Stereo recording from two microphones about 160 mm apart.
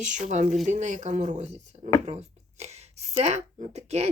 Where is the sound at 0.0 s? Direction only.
50° right (ahead or behind).